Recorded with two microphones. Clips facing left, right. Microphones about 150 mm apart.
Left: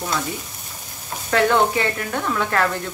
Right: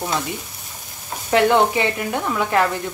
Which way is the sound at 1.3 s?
15° right (ahead or behind).